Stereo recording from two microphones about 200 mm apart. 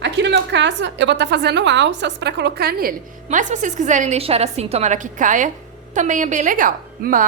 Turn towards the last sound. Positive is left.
turn(degrees=-45)  # may be behind; listen again after turning